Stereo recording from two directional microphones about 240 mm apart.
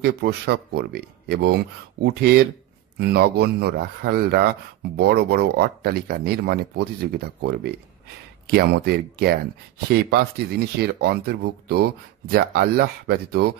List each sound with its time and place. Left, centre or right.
0.0 s speech: right